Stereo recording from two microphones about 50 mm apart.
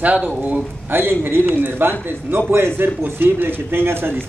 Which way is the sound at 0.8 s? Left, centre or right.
Right.